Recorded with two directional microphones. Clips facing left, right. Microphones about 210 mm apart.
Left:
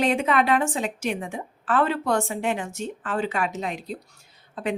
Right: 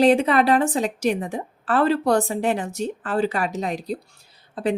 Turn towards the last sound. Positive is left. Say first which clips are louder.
# right 5 dB
turn(degrees=-35)  # may be behind; listen again after turning